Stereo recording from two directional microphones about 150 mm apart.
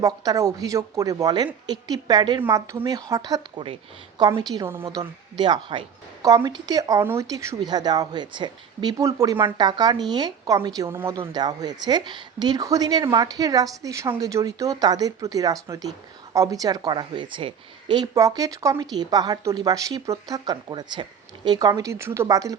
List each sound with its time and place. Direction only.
0.0 s speech: 20° right (ahead or behind)
4.8 s speech: 35° right (ahead or behind)